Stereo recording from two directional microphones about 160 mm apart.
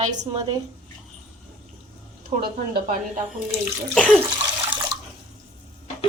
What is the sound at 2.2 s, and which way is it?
A woman's voice, 70° right (ahead or behind).